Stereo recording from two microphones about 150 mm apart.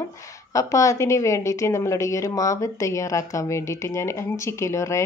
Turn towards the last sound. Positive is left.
turn(degrees=20)  # may be behind; listen again after turning